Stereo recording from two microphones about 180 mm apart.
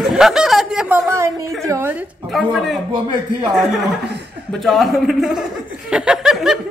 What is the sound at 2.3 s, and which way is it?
Speech, centre (ahead or behind).